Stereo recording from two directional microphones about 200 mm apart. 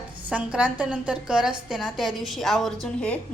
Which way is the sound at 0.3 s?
5° right (ahead or behind).